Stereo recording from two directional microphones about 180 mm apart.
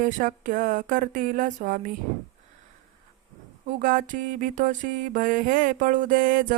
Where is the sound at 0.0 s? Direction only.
50° right (ahead or behind).